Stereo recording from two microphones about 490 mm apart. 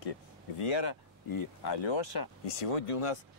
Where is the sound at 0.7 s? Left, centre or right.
Left.